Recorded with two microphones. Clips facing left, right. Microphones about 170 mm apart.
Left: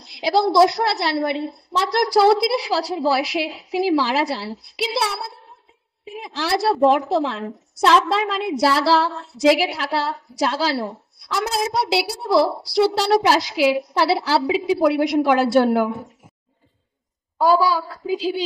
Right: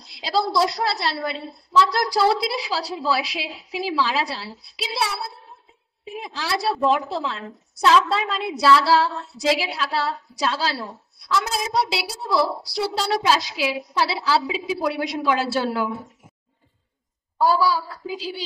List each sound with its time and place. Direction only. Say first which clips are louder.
0.0 s a sound: left 5 dB; 60° left (ahead or behind)
0.6 s a woman's voice: left 6 dB; 60° left (ahead or behind)
17.4 s a woman's voice: left 3 dB; 50° left (ahead or behind)